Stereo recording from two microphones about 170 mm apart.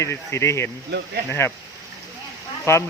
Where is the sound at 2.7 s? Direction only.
15° left (ahead or behind).